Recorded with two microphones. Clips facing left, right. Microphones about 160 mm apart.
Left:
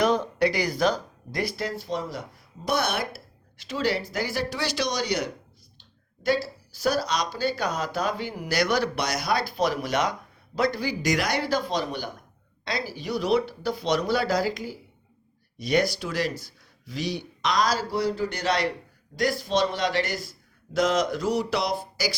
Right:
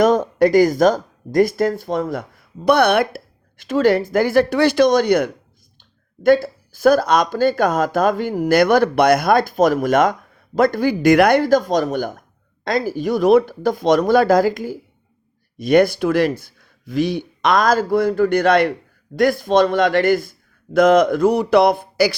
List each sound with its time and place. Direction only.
0.0 s speech: 45° right (ahead or behind)